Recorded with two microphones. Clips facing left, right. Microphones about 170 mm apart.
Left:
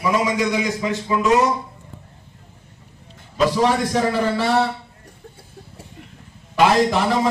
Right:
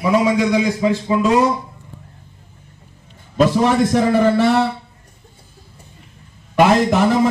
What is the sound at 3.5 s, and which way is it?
Speech, 55° right (ahead or behind).